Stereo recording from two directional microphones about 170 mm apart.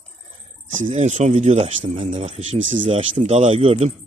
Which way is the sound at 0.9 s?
45° right (ahead or behind).